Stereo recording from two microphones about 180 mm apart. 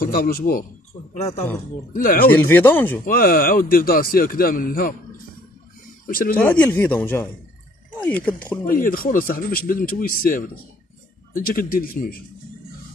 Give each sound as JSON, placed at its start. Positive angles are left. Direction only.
{"t": 0.0, "sound": "a man's voice", "side_deg": 55}
{"t": 2.0, "sound": "speech", "side_deg": 50}
{"t": 2.2, "sound": "speech", "side_deg": 10}
{"t": 3.1, "sound": "speech", "side_deg": 55}
{"t": 6.0, "sound": "speech", "side_deg": 50}
{"t": 6.6, "sound": "speech", "side_deg": 10}
{"t": 8.6, "sound": "speech", "side_deg": 50}